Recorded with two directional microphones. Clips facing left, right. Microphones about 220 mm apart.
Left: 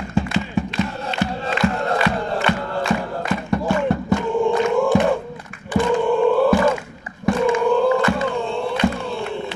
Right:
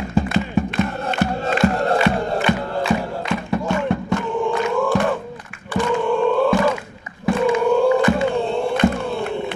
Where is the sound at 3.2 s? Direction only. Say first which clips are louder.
Left 1 dB; 5° left (ahead or behind).